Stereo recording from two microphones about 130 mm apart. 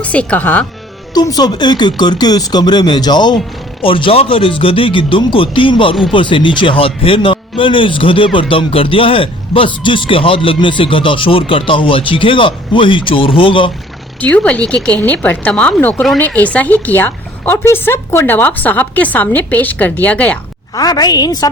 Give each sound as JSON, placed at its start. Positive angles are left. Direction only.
{"t": 0.0, "sound": "speech", "side_deg": 10}
{"t": 1.1, "sound": "speech", "side_deg": 30}
{"t": 14.2, "sound": "speech", "side_deg": 10}
{"t": 20.7, "sound": "speech", "side_deg": 30}